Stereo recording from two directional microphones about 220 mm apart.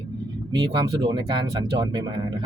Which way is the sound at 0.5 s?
20° right (ahead or behind).